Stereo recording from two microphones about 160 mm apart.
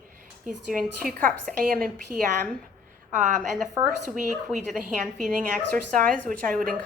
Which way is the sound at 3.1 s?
50° right (ahead or behind).